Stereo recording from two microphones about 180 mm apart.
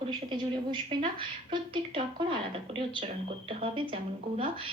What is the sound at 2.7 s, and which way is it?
A woman's voice, 30° right (ahead or behind).